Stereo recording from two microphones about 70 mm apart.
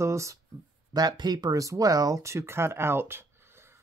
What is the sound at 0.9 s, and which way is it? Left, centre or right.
Speech, right.